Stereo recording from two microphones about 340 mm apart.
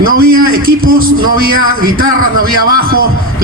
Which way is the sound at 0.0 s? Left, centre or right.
Right.